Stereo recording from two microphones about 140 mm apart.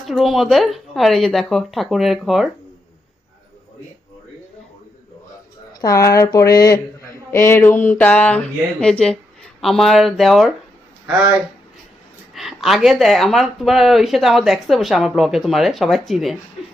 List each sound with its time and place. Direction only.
0.0 s speech: centre (ahead or behind)
5.8 s speech: 25° left (ahead or behind); by 10.5 s centre (ahead or behind)
12.3 s speech: centre (ahead or behind)